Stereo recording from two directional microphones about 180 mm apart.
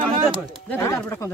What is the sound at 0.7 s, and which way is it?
Speech, 15° left (ahead or behind).